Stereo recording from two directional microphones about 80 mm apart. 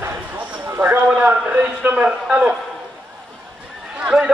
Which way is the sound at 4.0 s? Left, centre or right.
Centre.